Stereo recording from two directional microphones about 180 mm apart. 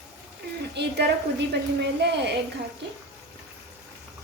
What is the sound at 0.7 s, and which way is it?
A woman's voice, 70° right (ahead or behind).